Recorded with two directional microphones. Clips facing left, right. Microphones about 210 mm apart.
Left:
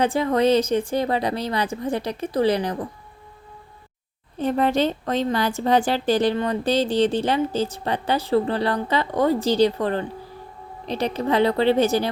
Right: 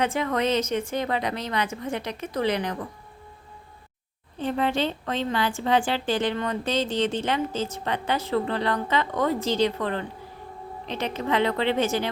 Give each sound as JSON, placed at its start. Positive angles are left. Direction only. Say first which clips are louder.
{"t": 0.0, "sound": "a woman's voice", "louder": "left 5 dB", "side_deg": 35}
{"t": 4.4, "sound": "a woman's voice", "louder": "left 5 dB", "side_deg": 45}